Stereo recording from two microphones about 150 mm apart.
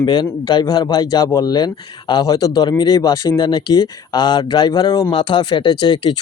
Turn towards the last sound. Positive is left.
turn(degrees=30)  # may be behind; listen again after turning